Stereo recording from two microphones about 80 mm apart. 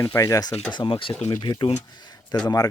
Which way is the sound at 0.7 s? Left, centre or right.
Left.